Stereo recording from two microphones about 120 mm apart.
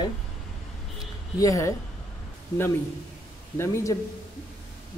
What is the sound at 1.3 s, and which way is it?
Speech, 25° left (ahead or behind).